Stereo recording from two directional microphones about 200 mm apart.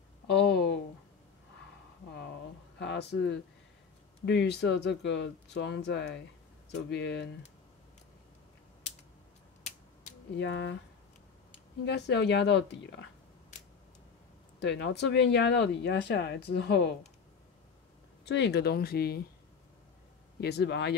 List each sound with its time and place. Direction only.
0.4 s a sound: 55° left (ahead or behind)
2.8 s speech: 60° left (ahead or behind)
10.3 s speech: 60° left (ahead or behind)
11.8 s speech: 60° left (ahead or behind)
14.6 s speech: 60° left (ahead or behind)
18.2 s speech: 55° left (ahead or behind)
20.3 s speech: 55° left (ahead or behind)